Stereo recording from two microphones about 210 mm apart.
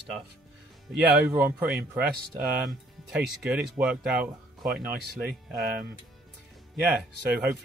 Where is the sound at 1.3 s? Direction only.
10° right (ahead or behind).